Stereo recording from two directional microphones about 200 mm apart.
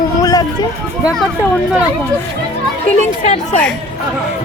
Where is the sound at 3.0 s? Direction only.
35° left (ahead or behind).